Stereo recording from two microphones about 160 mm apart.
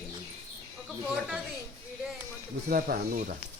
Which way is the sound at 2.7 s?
60° right (ahead or behind).